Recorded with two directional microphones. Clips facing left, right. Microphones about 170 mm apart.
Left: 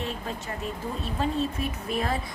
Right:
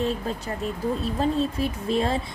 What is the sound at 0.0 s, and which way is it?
Speech, 35° right (ahead or behind).